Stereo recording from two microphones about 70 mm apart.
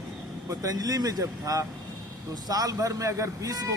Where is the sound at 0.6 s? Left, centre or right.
Right.